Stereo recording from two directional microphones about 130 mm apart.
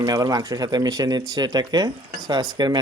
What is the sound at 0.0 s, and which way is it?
Speech, 30° right (ahead or behind).